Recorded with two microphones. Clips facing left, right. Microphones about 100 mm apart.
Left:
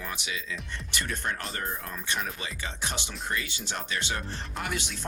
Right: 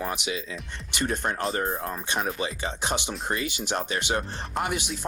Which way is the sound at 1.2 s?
35° right (ahead or behind).